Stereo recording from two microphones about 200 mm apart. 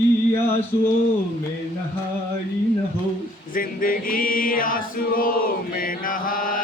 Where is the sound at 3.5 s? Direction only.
45° left (ahead or behind).